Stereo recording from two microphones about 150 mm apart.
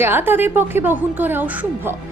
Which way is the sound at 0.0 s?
15° right (ahead or behind).